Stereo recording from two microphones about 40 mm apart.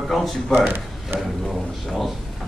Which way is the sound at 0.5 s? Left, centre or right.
Right.